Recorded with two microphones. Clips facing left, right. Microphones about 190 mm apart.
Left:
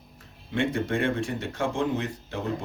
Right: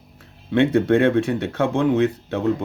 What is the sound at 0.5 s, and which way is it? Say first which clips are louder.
Speech: right 10 dB; 65° right (ahead or behind).